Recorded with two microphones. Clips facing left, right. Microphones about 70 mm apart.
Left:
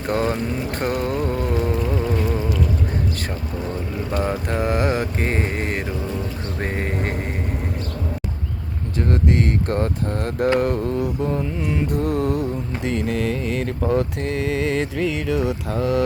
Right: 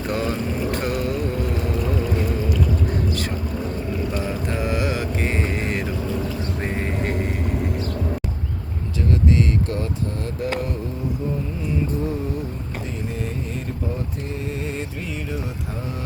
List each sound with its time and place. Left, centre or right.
0.1 s speech: left
4.1 s mantra: left
6.6 s a sound: left
9.0 s speech: left